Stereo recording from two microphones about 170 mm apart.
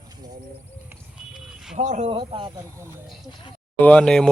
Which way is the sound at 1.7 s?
45° right (ahead or behind).